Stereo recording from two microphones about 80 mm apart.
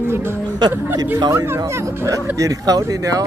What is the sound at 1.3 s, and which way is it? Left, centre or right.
Speech, right.